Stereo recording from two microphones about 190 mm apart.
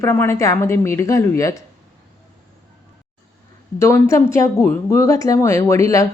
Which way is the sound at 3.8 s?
15° left (ahead or behind).